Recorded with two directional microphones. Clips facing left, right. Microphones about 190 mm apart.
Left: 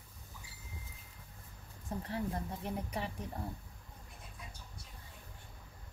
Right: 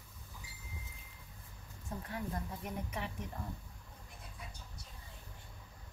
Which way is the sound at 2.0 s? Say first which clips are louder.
Left 3 dB; 30° left (ahead or behind).